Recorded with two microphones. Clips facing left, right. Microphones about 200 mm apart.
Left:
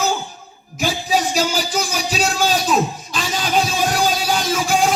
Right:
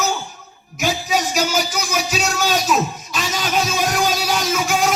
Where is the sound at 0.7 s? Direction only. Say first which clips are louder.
Left 1 dB; 35° left (ahead or behind).